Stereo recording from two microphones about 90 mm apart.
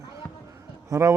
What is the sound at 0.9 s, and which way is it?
Speech, 35° right (ahead or behind).